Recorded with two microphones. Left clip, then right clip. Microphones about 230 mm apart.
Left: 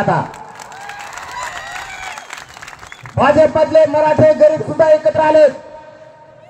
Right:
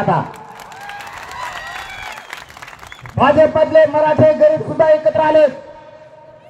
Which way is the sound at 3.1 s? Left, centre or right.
Left.